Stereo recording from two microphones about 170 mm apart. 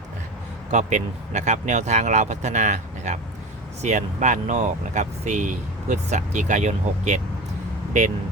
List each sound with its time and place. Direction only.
0.7 s speech: 45° right (ahead or behind)